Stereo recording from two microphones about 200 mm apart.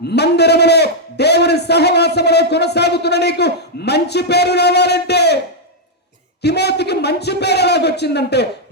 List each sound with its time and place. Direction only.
0.1 s a man's voice: 55° left (ahead or behind)
6.4 s a man's voice: 55° left (ahead or behind)